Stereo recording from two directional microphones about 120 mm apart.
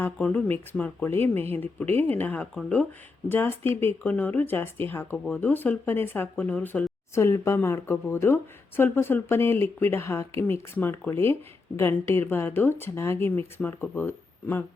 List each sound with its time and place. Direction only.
0.0 s speech: 10° left (ahead or behind)